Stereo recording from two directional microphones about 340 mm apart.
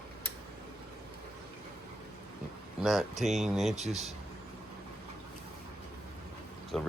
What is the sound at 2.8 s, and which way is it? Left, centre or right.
Speech, centre.